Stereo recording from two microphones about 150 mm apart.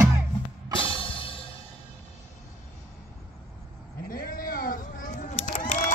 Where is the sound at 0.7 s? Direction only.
35° left (ahead or behind).